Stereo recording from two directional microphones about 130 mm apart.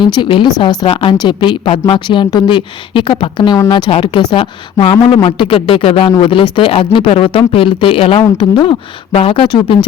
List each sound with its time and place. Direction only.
0.0 s a woman's voice: 35° left (ahead or behind)
6.1 s a woman's voice: 35° left (ahead or behind)